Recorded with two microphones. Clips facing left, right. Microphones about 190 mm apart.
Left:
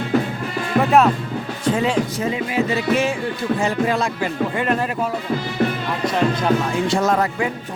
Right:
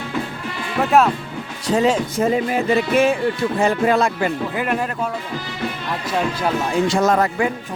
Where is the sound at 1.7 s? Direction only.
45° right (ahead or behind).